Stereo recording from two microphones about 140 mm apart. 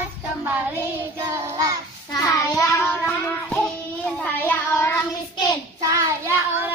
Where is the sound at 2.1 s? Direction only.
25° left (ahead or behind).